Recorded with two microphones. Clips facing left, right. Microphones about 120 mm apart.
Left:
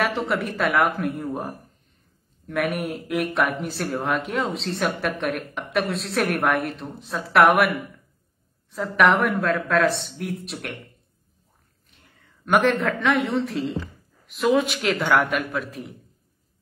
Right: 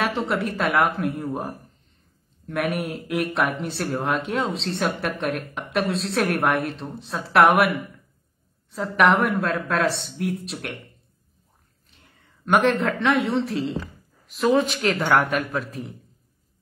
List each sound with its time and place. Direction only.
0.0 s speech: centre (ahead or behind)
12.4 s speech: centre (ahead or behind)
15.3 s a man's voice: 35° right (ahead or behind)